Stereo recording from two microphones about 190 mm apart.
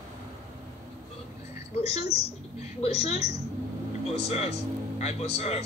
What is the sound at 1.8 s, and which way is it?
Speech, 35° left (ahead or behind).